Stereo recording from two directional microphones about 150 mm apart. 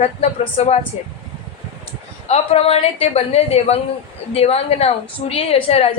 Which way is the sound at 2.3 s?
45° left (ahead or behind).